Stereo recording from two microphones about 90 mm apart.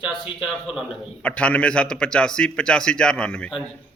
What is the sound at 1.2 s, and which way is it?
Speech, 15° left (ahead or behind).